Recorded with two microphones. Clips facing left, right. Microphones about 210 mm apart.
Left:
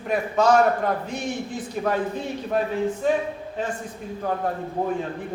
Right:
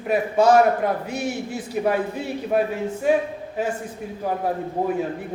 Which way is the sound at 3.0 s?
10° right (ahead or behind).